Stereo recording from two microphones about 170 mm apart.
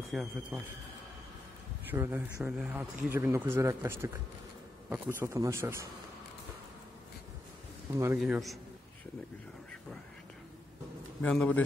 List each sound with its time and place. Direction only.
0.1 s a man's voice: 5° right (ahead or behind)
1.9 s speech: 10° right (ahead or behind)
7.9 s speech: 15° right (ahead or behind)
8.2 s a man's voice: centre (ahead or behind)
11.2 s a man's voice: 5° left (ahead or behind)